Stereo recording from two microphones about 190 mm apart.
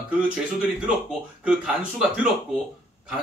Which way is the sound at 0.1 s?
5° right (ahead or behind).